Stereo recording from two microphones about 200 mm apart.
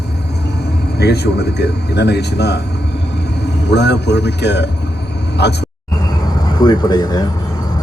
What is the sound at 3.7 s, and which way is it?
A man's voice, 60° left (ahead or behind).